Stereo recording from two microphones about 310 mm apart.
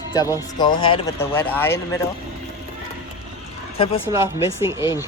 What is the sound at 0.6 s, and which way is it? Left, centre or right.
Speech, centre.